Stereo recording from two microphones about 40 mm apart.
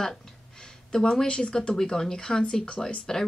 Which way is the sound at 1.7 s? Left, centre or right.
Centre.